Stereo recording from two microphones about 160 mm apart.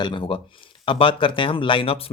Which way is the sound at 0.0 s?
30° left (ahead or behind).